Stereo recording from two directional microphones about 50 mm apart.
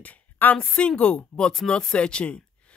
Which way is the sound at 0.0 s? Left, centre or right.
Left.